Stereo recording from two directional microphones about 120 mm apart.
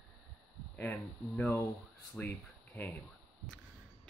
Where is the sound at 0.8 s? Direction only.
15° left (ahead or behind).